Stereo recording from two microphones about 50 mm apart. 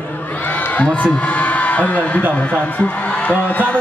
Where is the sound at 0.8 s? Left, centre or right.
Left.